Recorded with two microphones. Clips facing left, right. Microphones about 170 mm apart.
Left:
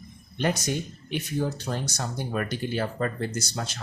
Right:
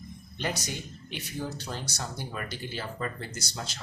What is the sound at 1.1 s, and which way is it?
Speech, 55° left (ahead or behind).